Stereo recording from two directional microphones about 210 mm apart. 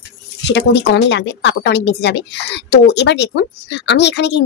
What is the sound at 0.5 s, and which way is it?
Speech, 55° left (ahead or behind).